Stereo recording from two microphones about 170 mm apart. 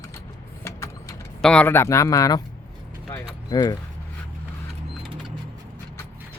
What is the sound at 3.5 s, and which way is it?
Speech, 25° left (ahead or behind).